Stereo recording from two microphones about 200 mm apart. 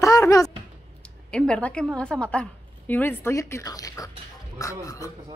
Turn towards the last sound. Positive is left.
turn(degrees=15)  # may be behind; listen again after turning